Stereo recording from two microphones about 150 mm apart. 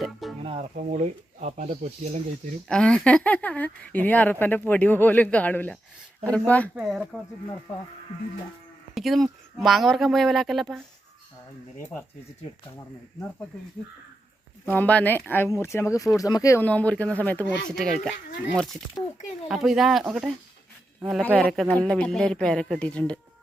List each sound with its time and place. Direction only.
0.0 s music: centre (ahead or behind)
0.8 s speech: 50° right (ahead or behind)
2.6 s speech: 5° left (ahead or behind)
6.7 s a woman's voice: 5° right (ahead or behind)
9.0 s a woman's voice: centre (ahead or behind)
14.7 s a woman's voice: 10° left (ahead or behind)